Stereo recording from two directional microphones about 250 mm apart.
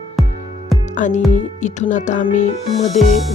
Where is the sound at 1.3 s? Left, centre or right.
Left.